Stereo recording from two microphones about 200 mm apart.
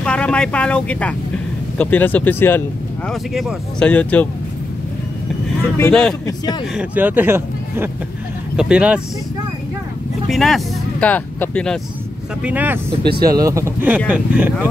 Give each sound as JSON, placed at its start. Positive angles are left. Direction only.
{"t": 0.0, "sound": "speech", "side_deg": 5}
{"t": 5.8, "sound": "speech", "side_deg": 5}
{"t": 6.2, "sound": "a man's voice", "side_deg": 20}
{"t": 6.7, "sound": "speech", "side_deg": -5}
{"t": 10.3, "sound": "speech", "side_deg": 0}
{"t": 12.4, "sound": "speech", "side_deg": -5}